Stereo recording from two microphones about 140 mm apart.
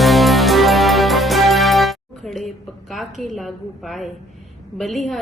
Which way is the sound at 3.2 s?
Centre (ahead or behind).